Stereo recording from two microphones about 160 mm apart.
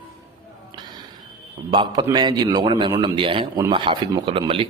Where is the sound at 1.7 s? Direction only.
30° right (ahead or behind).